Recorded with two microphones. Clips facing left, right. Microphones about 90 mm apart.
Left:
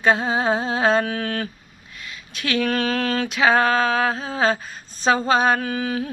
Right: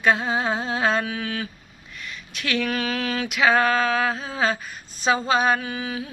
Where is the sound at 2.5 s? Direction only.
40° left (ahead or behind).